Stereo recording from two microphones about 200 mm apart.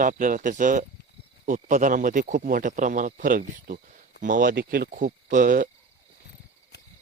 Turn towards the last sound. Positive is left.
turn(degrees=-45)  # may be behind; listen again after turning